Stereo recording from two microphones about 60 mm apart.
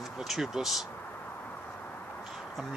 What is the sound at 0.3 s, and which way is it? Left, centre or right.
Speech, centre.